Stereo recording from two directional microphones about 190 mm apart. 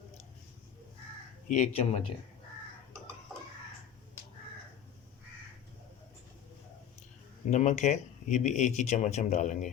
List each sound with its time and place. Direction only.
1.5 s speech: 35° left (ahead or behind)
7.5 s speech: 40° left (ahead or behind)